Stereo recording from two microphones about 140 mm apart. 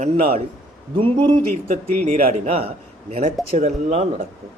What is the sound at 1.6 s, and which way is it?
Speech, 90° right.